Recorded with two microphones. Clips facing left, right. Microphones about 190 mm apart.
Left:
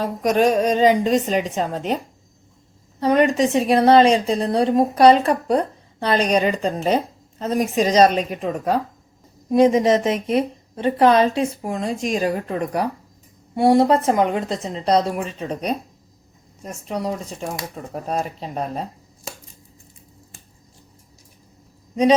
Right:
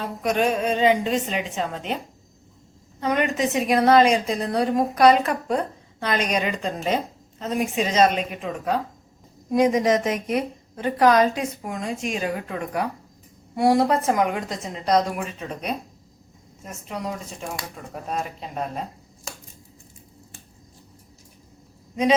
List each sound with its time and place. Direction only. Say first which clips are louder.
0.0 s a woman's voice: left 5 dB; 40° left (ahead or behind)
3.0 s a woman's voice: left 6 dB; 35° left (ahead or behind)
9.5 s a woman's voice: left 4 dB; 30° left (ahead or behind)